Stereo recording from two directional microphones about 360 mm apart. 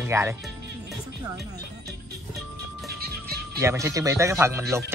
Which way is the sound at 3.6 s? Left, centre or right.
Centre.